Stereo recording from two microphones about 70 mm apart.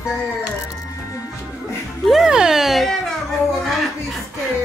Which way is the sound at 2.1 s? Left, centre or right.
Centre.